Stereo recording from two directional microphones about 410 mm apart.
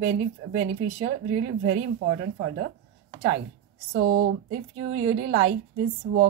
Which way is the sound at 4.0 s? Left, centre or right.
Right.